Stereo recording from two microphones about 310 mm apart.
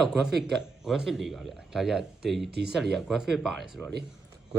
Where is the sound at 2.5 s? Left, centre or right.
Right.